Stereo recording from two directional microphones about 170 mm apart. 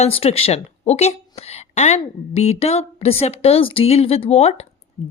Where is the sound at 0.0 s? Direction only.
35° left (ahead or behind).